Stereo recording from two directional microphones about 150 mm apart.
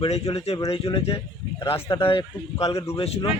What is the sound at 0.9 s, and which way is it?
Speech, 40° left (ahead or behind).